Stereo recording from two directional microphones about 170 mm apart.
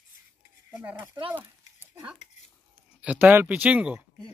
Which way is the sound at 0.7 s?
10° right (ahead or behind).